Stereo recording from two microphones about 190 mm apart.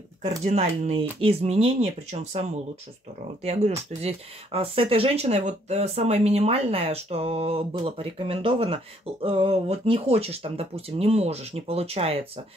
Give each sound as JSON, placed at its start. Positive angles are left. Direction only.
{"t": 0.2, "sound": "speech", "side_deg": -35}
{"t": 4.0, "sound": "speech", "side_deg": -30}